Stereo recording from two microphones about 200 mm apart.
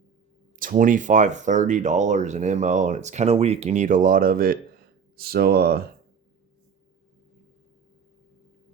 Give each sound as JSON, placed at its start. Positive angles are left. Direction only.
{"t": 0.6, "sound": "speech", "side_deg": -40}